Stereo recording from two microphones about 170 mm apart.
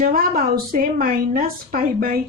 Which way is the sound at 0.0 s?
60° right (ahead or behind).